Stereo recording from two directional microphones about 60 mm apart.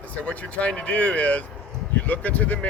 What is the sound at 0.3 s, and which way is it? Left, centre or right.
Speech, left.